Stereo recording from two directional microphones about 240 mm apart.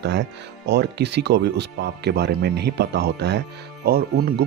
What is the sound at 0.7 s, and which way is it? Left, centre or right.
Speech, right.